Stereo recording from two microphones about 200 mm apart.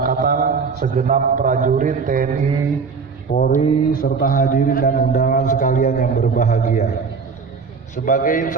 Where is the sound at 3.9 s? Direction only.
45° left (ahead or behind).